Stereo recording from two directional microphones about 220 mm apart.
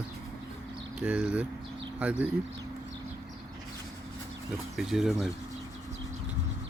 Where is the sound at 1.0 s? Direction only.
5° right (ahead or behind).